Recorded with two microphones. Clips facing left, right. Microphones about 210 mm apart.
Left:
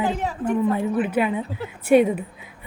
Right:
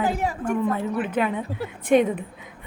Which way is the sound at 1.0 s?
10° left (ahead or behind).